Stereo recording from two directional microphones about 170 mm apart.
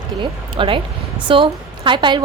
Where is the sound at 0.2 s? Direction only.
30° right (ahead or behind).